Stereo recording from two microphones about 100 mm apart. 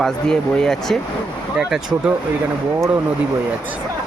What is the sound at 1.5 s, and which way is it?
Speech, 5° right (ahead or behind).